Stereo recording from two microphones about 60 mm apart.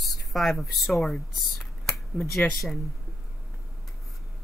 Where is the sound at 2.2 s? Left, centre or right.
Left.